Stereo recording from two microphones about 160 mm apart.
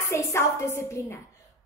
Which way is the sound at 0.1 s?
20° left (ahead or behind).